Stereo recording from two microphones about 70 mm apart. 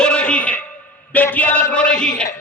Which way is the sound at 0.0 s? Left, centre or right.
Centre.